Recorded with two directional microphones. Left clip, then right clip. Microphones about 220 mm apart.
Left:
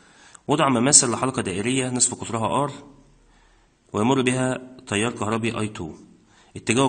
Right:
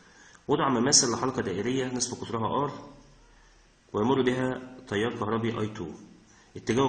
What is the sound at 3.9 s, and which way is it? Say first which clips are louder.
Speech: left 4 dB; 50° left (ahead or behind).